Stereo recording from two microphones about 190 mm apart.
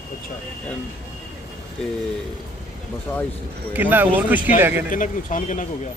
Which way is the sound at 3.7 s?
10° right (ahead or behind).